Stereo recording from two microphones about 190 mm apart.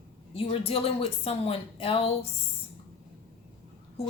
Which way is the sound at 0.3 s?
30° left (ahead or behind).